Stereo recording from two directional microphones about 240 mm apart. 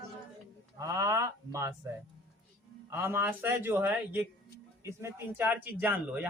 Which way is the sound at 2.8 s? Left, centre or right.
Centre.